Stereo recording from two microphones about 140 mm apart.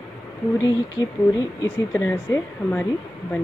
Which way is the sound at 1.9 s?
15° left (ahead or behind).